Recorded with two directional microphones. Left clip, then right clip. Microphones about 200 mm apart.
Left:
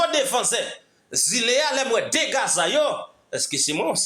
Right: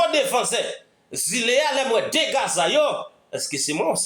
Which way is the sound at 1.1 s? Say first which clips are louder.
Even; 25° left (ahead or behind).